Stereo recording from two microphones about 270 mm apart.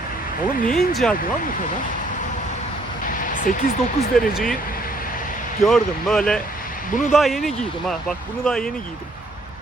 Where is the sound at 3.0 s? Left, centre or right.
Left.